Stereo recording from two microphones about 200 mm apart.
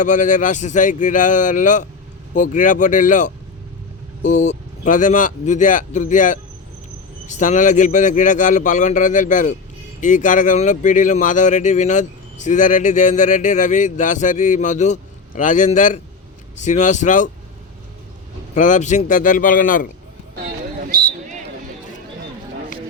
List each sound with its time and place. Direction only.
0.0 s speech: 40° left (ahead or behind)
18.5 s speech: 35° left (ahead or behind)
20.9 s a sound: 45° right (ahead or behind)